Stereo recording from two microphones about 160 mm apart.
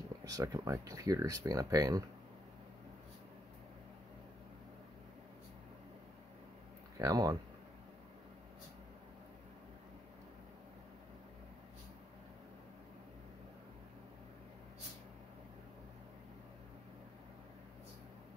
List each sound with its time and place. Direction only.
0.2 s speech: 20° right (ahead or behind)
7.0 s speech: 20° right (ahead or behind)